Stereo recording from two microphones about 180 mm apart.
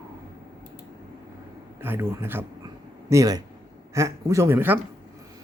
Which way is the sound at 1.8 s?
10° right (ahead or behind).